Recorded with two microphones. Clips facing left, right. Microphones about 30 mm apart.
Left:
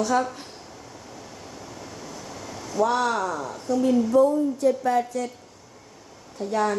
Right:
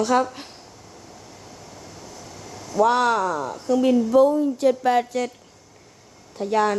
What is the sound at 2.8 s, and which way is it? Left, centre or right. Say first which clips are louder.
Speech: right 4 dB; right.